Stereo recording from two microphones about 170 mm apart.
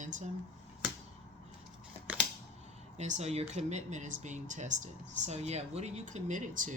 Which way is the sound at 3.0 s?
40° right (ahead or behind).